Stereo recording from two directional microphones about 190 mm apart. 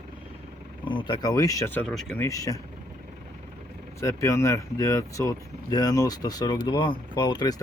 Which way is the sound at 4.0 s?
15° left (ahead or behind).